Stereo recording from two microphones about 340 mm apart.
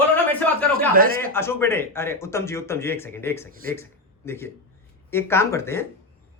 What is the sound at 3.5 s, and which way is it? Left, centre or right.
Speech, right.